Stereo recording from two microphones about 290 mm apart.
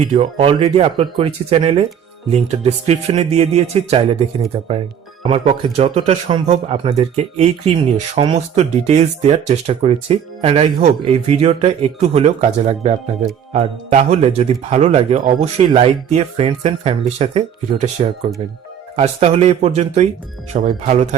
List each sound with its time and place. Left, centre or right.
0.1 s speech: centre
18.9 s speech: right